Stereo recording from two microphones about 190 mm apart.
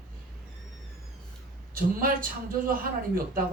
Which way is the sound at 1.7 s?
50° right (ahead or behind).